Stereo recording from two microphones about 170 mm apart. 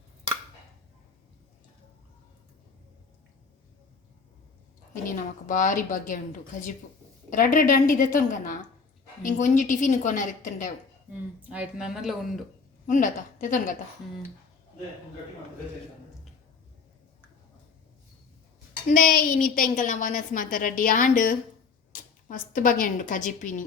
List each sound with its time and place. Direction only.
5.0 s a woman's voice: 50° left (ahead or behind)
7.3 s a woman's voice: 50° left (ahead or behind)
11.1 s speech: 10° right (ahead or behind)
12.9 s a woman's voice: 50° left (ahead or behind)
18.9 s a woman's voice: 50° left (ahead or behind)